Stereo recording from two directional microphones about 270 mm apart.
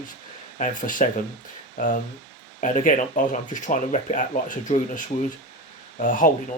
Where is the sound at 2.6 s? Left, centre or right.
Left.